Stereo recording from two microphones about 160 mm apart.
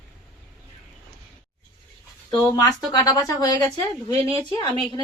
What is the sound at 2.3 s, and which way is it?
A woman's voice, 20° left (ahead or behind).